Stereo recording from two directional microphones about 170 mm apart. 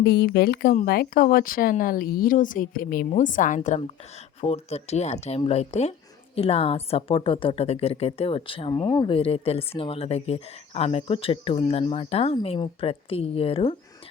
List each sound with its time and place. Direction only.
0.0 s speech: 70° left (ahead or behind); by 13.7 s 35° left (ahead or behind)